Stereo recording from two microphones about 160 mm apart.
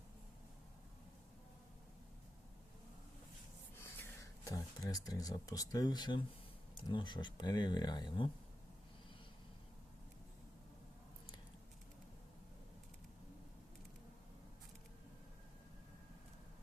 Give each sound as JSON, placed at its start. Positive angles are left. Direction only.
{"t": 3.8, "sound": "speech", "side_deg": 15}